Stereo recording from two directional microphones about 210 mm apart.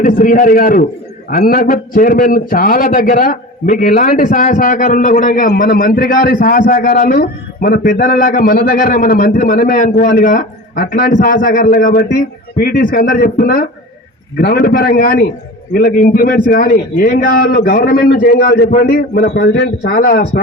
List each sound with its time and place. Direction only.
0.0 s a man's voice: 40° left (ahead or behind)